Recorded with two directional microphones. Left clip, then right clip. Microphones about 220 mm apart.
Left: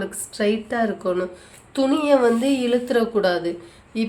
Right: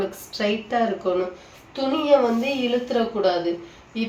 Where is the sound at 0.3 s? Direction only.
20° left (ahead or behind).